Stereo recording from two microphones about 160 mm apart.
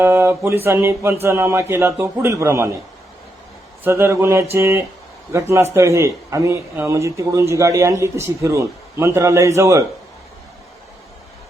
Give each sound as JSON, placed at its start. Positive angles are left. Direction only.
{"t": 0.0, "sound": "speech", "side_deg": -15}
{"t": 3.8, "sound": "speech", "side_deg": -15}